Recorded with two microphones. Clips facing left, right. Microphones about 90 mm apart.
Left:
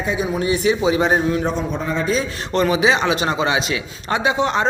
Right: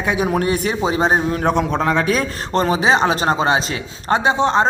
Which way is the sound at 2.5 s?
35° right (ahead or behind).